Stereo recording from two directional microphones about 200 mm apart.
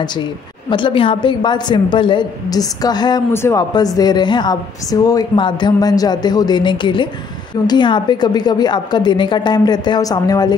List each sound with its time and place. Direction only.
0.7 s a woman's voice: 25° left (ahead or behind)